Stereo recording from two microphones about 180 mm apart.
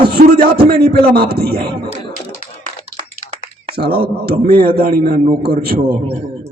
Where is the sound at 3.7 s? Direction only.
55° right (ahead or behind).